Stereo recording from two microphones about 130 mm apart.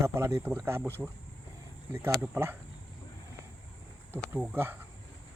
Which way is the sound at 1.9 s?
20° right (ahead or behind).